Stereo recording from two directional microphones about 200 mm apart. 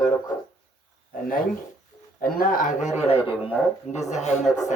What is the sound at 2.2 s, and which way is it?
A man's voice, 45° left (ahead or behind).